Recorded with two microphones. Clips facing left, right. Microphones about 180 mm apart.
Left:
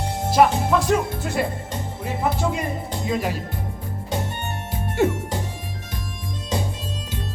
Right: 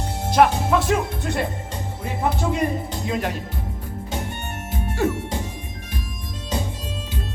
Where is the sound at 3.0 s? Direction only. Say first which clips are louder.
Left 3 dB; centre (ahead or behind).